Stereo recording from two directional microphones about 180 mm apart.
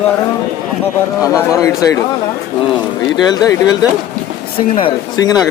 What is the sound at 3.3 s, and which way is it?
Speech, 20° left (ahead or behind).